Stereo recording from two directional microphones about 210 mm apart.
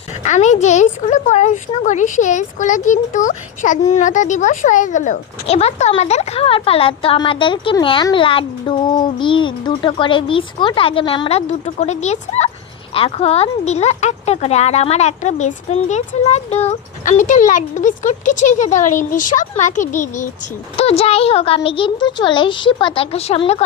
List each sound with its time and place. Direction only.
0.2 s a child's voice: 35° left (ahead or behind)